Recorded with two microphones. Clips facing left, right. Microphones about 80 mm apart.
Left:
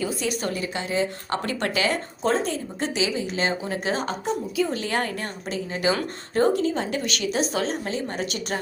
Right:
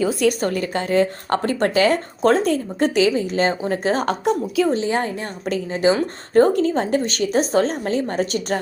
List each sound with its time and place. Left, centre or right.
0.3 s a woman's voice: right
2.2 s a woman's voice: right
4.0 s a woman's voice: right
4.7 s a woman's voice: right
6.3 s a woman's voice: right